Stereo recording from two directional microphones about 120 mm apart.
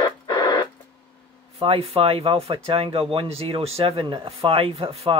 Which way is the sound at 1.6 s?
50° right (ahead or behind).